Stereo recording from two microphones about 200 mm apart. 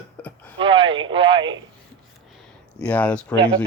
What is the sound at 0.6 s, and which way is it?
Speech, 25° right (ahead or behind).